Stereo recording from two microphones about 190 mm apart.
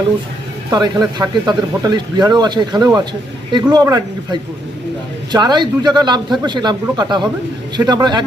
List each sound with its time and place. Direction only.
0.7 s speech: 20° right (ahead or behind)